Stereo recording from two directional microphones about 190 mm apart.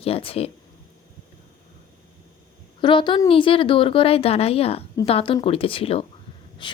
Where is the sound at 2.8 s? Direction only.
25° left (ahead or behind).